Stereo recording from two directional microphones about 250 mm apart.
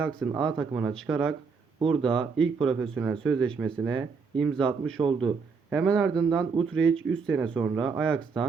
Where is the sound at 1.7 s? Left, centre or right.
Right.